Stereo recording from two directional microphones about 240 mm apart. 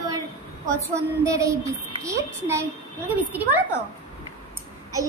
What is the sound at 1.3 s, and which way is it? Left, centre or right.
A child's voice, centre.